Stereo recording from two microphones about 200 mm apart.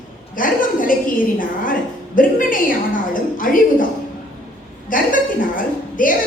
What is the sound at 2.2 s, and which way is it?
A woman's voice, 45° left (ahead or behind).